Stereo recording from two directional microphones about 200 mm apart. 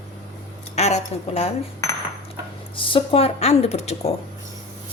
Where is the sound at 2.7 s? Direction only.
25° left (ahead or behind).